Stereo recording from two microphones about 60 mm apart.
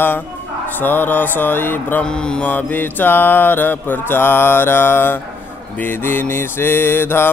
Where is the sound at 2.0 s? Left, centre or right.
Centre.